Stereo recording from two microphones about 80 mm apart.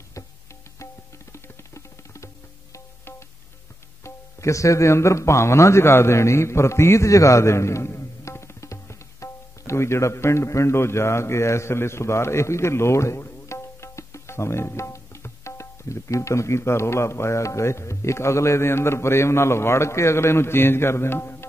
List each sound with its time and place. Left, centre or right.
1.3 s music: left
4.0 s speech: left